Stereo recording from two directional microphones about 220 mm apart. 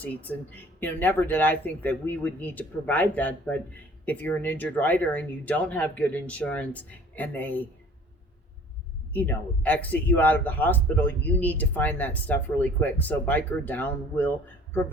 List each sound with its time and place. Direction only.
0.0 s speech: 5° left (ahead or behind)
9.1 s speech: 5° left (ahead or behind)